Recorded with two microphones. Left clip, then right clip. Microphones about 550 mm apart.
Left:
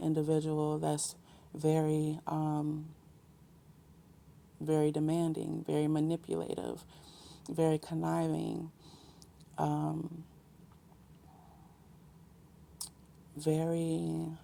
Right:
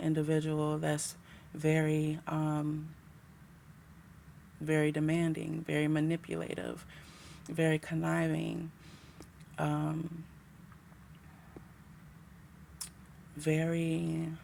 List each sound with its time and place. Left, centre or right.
0.0 s speech: left
4.9 s speech: left
13.4 s speech: left